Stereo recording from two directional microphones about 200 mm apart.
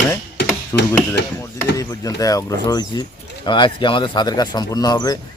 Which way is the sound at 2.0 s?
15° left (ahead or behind).